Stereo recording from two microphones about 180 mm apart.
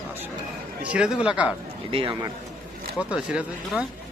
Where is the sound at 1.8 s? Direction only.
30° right (ahead or behind).